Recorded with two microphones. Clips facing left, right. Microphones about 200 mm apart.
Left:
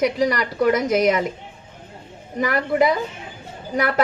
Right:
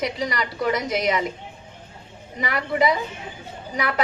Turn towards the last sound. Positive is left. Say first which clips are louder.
# left 4 dB
turn(degrees=50)  # may be behind; listen again after turning